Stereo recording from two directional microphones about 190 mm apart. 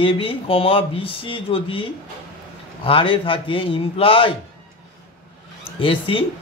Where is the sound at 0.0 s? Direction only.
25° left (ahead or behind).